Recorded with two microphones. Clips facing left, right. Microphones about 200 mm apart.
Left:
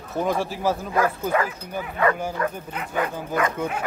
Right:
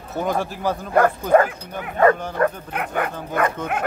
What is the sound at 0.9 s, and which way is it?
Speech, 55° right (ahead or behind).